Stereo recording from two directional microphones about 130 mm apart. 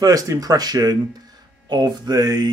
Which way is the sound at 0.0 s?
25° right (ahead or behind).